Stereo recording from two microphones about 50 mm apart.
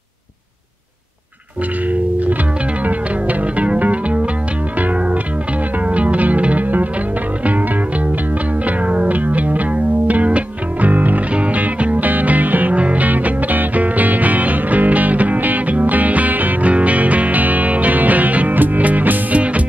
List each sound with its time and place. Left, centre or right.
1.9 s music: right